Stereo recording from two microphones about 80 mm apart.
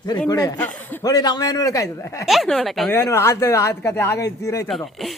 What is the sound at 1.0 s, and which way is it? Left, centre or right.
A man's voice, left.